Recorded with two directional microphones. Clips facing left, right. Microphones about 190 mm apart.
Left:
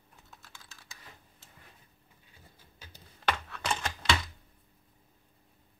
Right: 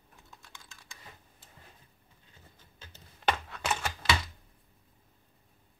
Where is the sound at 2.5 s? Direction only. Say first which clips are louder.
Left 1 dB; 10° left (ahead or behind).